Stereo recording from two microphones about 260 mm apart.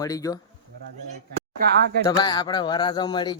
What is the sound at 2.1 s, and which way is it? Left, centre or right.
Speech, centre.